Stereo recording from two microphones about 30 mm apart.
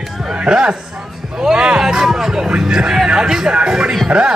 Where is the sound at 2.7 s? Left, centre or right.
Right.